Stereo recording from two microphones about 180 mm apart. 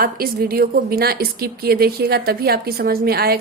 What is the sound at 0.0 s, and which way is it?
A woman's voice, 55° right (ahead or behind).